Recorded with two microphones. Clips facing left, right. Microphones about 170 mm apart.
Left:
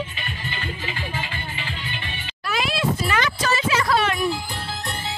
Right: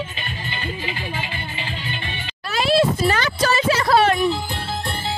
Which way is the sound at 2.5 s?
30° right (ahead or behind).